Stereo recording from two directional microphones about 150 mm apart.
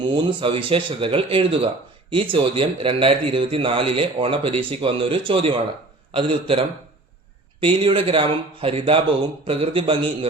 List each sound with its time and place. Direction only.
0.1 s speech: 30° right (ahead or behind)